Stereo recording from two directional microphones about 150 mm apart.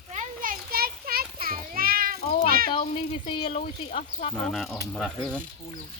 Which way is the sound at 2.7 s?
40° left (ahead or behind).